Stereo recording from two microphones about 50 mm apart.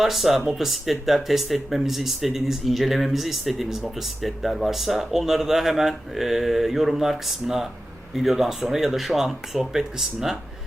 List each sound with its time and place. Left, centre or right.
0.0 s speech: centre